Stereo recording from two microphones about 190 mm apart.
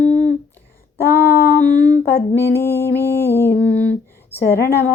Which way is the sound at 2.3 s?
10° left (ahead or behind).